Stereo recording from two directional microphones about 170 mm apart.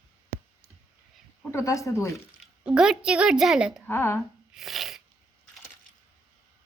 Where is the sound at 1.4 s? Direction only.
15° left (ahead or behind).